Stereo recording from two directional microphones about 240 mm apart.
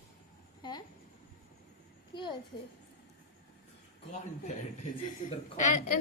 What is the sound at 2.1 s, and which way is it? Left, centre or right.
Speech, centre.